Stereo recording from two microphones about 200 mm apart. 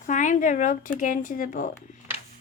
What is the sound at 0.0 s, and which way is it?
Speech, 40° left (ahead or behind).